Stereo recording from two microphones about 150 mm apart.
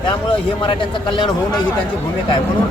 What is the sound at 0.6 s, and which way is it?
Speech, 35° left (ahead or behind).